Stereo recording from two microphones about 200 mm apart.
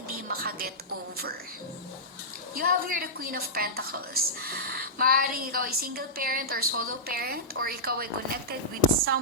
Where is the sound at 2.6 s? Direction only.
45° right (ahead or behind).